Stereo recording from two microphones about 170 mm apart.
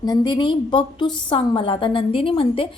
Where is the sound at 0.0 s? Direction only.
25° left (ahead or behind).